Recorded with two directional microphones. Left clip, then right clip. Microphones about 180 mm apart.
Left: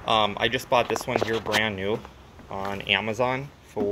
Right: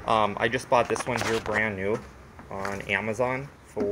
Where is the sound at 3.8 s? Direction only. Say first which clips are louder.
Left 2 dB; 20° left (ahead or behind).